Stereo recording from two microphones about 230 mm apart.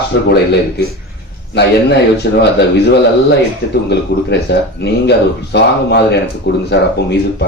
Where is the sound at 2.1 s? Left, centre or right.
Left.